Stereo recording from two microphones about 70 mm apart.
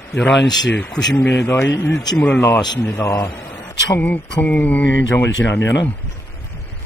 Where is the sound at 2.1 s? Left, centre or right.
Centre.